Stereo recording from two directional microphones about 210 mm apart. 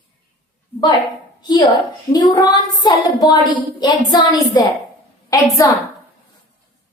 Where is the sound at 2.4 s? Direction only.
20° left (ahead or behind).